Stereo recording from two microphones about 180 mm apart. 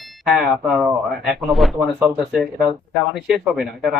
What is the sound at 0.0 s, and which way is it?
Speech, centre (ahead or behind).